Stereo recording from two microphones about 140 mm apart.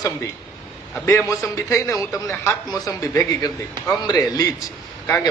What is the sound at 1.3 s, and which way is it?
A man's voice, 20° left (ahead or behind).